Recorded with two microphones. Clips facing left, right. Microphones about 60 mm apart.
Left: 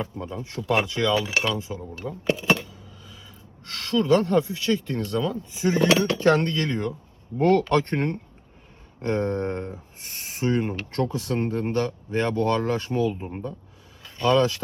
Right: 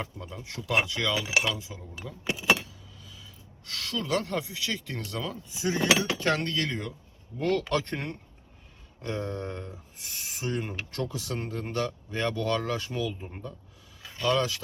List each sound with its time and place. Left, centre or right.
0.2 s speech: left
2.6 s a sound: left
3.7 s speech: left